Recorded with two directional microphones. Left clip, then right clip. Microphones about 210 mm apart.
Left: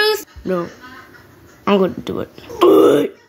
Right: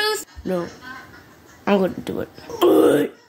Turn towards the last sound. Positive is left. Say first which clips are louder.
# left 4 dB
turn(degrees=5)  # may be behind; listen again after turning